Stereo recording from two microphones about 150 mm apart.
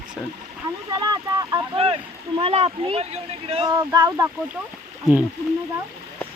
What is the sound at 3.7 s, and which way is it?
Speech, 25° right (ahead or behind).